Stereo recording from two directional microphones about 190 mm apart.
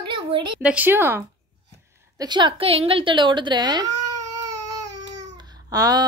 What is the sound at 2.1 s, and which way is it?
A woman's voice, 20° right (ahead or behind).